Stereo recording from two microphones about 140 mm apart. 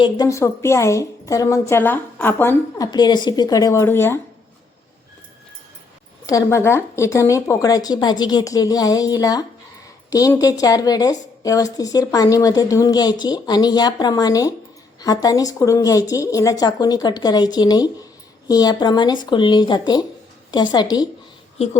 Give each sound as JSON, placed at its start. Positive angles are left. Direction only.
{"t": 0.0, "sound": "a woman's voice", "side_deg": 25}
{"t": 6.2, "sound": "a woman's voice", "side_deg": 20}